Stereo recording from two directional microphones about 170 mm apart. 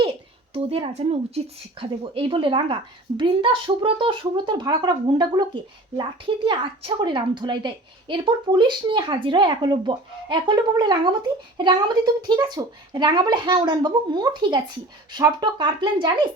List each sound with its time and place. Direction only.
0.5 s a woman's voice: 35° right (ahead or behind)